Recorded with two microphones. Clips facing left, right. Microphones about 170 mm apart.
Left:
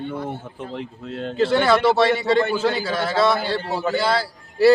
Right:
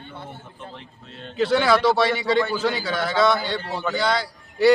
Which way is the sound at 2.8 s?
25° left (ahead or behind).